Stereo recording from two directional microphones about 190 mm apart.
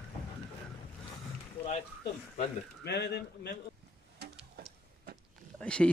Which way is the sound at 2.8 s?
60° left (ahead or behind).